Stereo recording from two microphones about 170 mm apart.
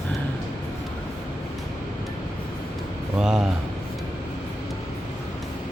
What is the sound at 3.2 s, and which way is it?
Speech, 5° right (ahead or behind).